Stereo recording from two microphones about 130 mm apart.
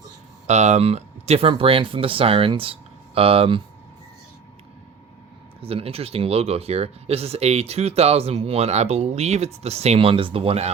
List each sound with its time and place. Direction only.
0.4 s speech: 60° right (ahead or behind); by 3.6 s 45° right (ahead or behind)
5.5 s speech: 50° right (ahead or behind)